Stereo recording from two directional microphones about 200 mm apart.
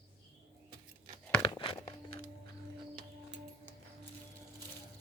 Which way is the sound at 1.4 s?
25° left (ahead or behind).